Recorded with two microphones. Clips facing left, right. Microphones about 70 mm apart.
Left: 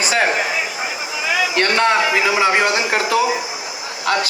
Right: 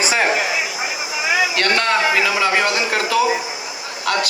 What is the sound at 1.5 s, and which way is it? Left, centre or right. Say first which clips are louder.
A man's voice: left 2 dB; centre.